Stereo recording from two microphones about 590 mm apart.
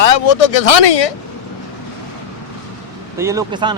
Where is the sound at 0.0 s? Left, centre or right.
Left.